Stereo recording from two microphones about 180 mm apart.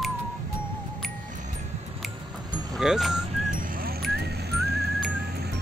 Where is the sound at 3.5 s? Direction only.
50° right (ahead or behind).